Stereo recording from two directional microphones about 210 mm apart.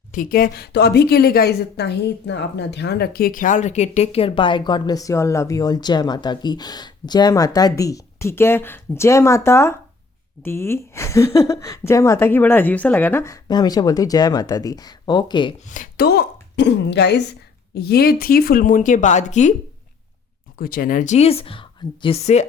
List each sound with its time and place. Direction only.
0.1 s speech: 40° left (ahead or behind); by 15.5 s 20° left (ahead or behind)
15.6 s a woman's voice: 40° left (ahead or behind)
20.6 s a woman's voice: 45° left (ahead or behind)